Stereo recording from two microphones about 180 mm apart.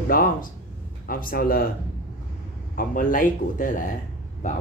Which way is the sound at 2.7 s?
50° left (ahead or behind).